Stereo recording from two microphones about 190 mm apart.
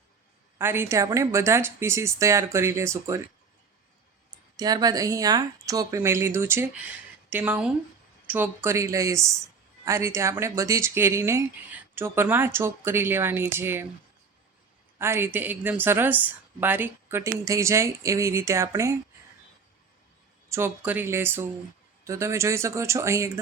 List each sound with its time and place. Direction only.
0.6 s speech: 10° right (ahead or behind)
4.5 s speech: 20° right (ahead or behind)
14.9 s speech: 15° right (ahead or behind)
20.5 s speech: 15° right (ahead or behind)